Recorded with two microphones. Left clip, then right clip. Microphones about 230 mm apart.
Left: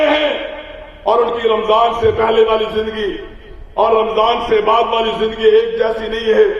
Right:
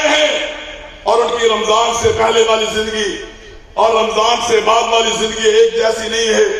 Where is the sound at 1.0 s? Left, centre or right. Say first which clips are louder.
Right 1 dB; left.